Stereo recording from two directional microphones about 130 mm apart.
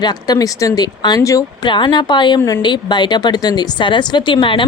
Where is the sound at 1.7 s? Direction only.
35° left (ahead or behind).